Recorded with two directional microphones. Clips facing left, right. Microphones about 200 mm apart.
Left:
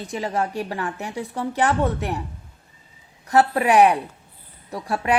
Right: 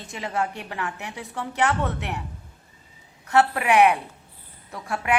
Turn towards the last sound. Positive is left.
turn(degrees=35)  # may be behind; listen again after turning